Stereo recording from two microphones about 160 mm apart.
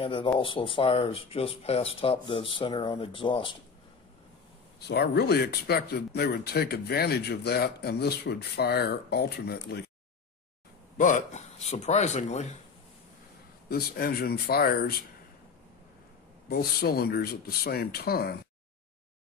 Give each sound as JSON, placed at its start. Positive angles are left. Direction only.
{"t": 0.0, "sound": "speech", "side_deg": 30}
{"t": 4.7, "sound": "speech", "side_deg": 90}
{"t": 11.0, "sound": "speech", "side_deg": 50}
{"t": 13.7, "sound": "speech", "side_deg": 75}
{"t": 16.4, "sound": "speech", "side_deg": 75}